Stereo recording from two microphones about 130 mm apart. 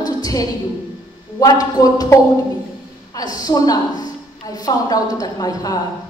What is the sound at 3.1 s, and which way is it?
A woman's voice, 30° left (ahead or behind).